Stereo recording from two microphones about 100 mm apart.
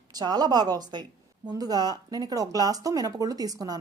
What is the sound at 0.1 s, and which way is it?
A woman's voice, 40° right (ahead or behind).